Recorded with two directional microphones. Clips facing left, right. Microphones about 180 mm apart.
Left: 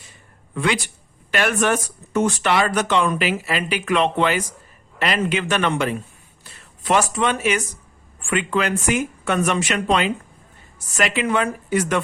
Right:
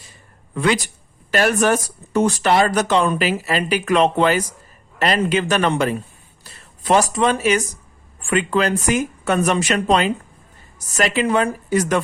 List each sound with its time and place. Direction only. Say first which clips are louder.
0.5 s speech: right 3 dB; 40° right (ahead or behind)